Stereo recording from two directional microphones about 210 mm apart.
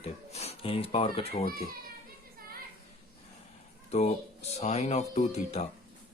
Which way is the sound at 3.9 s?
30° left (ahead or behind).